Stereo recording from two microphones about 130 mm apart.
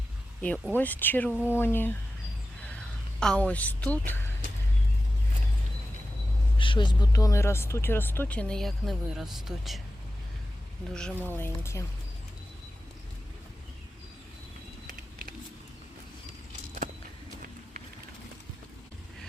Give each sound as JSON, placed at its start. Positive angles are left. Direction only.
{"t": 0.7, "sound": "speech", "side_deg": 15}
{"t": 6.6, "sound": "speech", "side_deg": 40}
{"t": 10.9, "sound": "speech", "side_deg": 10}